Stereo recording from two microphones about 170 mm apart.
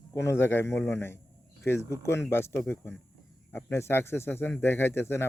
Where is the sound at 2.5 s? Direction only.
5° left (ahead or behind).